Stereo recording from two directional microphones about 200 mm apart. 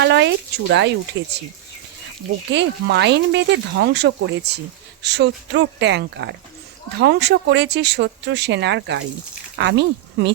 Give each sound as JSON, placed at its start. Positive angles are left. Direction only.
{"t": 0.0, "sound": "speech", "side_deg": -60}
{"t": 2.5, "sound": "speech", "side_deg": -60}